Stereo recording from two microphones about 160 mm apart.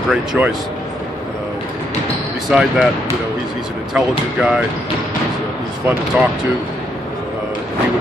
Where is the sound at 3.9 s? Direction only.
5° right (ahead or behind).